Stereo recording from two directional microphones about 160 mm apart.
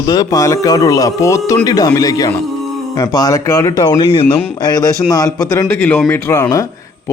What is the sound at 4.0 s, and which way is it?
Speech, 35° left (ahead or behind).